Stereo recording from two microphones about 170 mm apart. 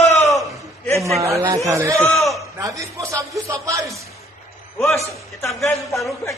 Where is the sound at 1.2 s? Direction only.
20° right (ahead or behind).